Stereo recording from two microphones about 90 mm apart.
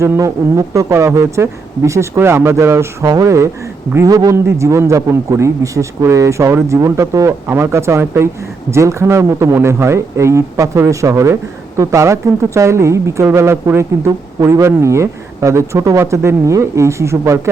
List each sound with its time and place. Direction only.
0.2 s speech: 40° right (ahead or behind)
7.4 s speech: 25° right (ahead or behind)